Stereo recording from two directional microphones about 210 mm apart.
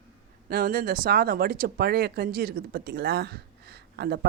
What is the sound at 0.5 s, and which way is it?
Speech, 45° right (ahead or behind).